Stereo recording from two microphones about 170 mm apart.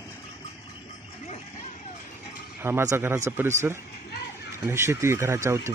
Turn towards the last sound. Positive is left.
turn(degrees=-15)  # may be behind; listen again after turning